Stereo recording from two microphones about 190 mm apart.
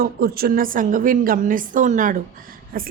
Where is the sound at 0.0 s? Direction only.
50° right (ahead or behind).